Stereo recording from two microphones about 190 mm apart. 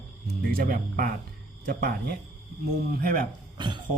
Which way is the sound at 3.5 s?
25° right (ahead or behind).